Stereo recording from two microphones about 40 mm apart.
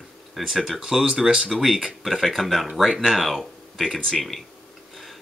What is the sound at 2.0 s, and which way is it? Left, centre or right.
Speech, centre.